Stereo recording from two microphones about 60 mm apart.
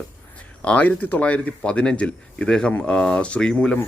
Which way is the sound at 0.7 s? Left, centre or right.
Left.